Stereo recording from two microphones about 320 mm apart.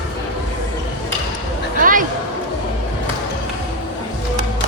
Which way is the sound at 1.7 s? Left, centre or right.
Right.